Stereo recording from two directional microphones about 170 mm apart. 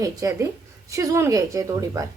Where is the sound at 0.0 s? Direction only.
20° right (ahead or behind).